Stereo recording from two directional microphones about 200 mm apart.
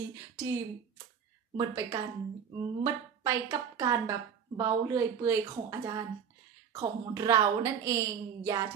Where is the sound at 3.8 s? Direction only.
15° right (ahead or behind).